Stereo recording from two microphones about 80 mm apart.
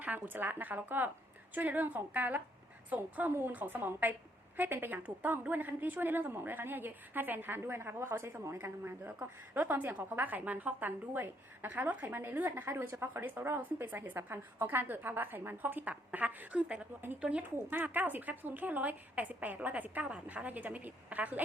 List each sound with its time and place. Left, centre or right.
0.0 s a woman's voice: right
17.7 s a woman's voice: right